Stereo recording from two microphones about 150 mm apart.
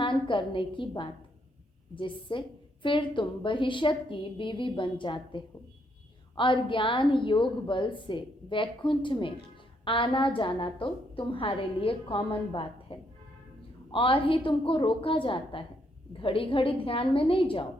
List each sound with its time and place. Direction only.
0.0 s a woman's voice: 35° left (ahead or behind)